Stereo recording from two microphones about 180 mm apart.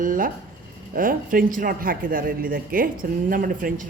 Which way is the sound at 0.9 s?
50° right (ahead or behind).